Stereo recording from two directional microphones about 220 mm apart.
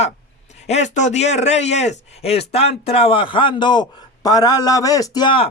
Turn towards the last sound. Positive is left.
turn(degrees=25)  # may be behind; listen again after turning